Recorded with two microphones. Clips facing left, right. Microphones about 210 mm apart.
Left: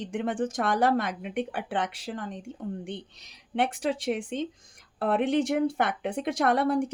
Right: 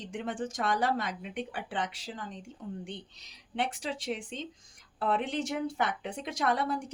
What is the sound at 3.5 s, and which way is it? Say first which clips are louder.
Speech: left 7 dB; 55° left (ahead or behind).